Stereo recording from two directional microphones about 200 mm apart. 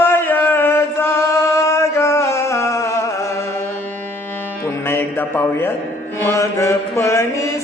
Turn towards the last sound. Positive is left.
turn(degrees=15)  # may be behind; listen again after turning